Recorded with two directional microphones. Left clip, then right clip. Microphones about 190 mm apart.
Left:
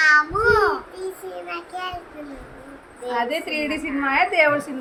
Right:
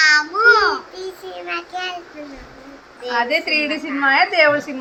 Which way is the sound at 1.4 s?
10° left (ahead or behind).